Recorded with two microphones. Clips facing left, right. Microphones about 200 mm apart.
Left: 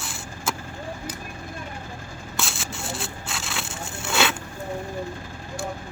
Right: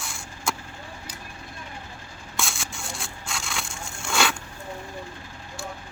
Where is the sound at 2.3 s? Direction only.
Centre (ahead or behind).